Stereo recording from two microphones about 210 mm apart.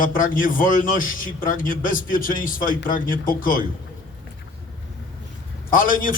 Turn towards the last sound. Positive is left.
turn(degrees=40)  # may be behind; listen again after turning